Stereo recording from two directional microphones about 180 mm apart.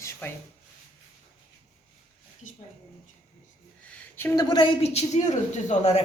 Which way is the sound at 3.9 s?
10° left (ahead or behind).